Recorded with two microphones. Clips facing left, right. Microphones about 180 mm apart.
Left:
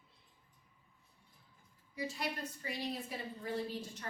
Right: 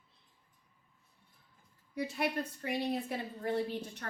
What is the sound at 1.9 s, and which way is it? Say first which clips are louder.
A woman's voice: right 6 dB; 60° right (ahead or behind).